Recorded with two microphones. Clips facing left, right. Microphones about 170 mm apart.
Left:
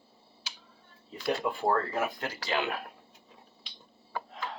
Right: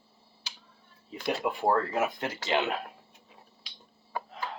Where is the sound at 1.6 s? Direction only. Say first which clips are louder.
Right 3 dB; 20° right (ahead or behind).